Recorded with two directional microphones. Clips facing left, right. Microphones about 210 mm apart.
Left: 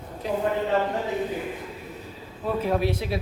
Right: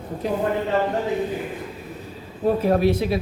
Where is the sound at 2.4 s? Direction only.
40° right (ahead or behind).